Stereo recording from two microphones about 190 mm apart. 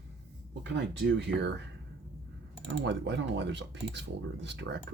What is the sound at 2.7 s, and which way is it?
Speech, 70° right (ahead or behind).